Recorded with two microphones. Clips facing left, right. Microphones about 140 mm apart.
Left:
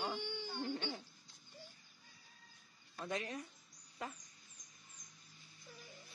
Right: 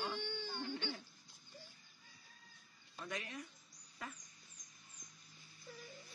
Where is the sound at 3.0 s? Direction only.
30° left (ahead or behind).